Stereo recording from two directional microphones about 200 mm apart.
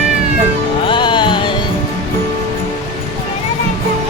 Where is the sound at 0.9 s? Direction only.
25° left (ahead or behind).